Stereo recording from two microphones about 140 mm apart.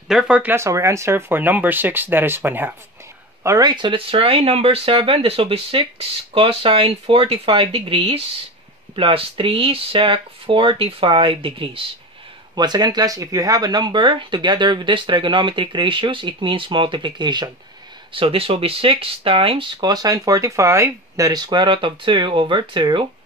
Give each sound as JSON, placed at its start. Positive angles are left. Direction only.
{"t": 0.1, "sound": "speech", "side_deg": -5}
{"t": 3.4, "sound": "speech", "side_deg": -25}